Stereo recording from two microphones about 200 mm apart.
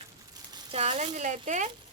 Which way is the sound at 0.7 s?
35° right (ahead or behind).